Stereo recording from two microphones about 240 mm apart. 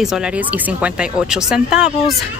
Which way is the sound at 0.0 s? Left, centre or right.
Centre.